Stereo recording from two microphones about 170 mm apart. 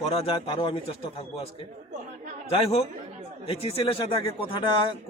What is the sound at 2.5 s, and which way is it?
A man's voice, 35° left (ahead or behind).